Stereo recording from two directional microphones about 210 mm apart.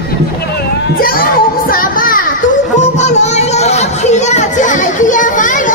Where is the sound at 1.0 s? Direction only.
45° left (ahead or behind).